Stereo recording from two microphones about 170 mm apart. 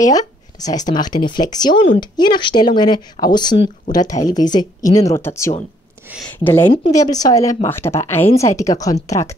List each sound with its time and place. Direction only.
0.1 s a sound: 20° left (ahead or behind)
0.8 s speech: 25° left (ahead or behind)
6.1 s speech: 10° right (ahead or behind)
6.4 s a woman's voice: 10° left (ahead or behind)